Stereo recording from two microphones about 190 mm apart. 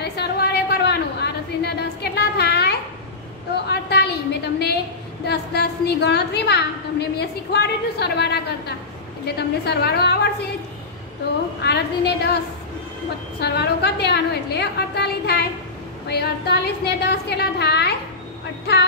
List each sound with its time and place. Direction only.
0.0 s a sound: 60° left (ahead or behind)
5.2 s a woman's voice: 60° left (ahead or behind)
11.6 s a woman's voice: 60° left (ahead or behind)
13.4 s a woman's voice: 60° left (ahead or behind)